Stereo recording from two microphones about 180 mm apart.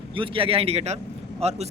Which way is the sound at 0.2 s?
30° right (ahead or behind).